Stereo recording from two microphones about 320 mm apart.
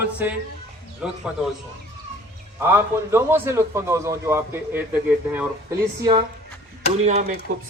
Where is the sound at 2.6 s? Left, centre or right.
Centre.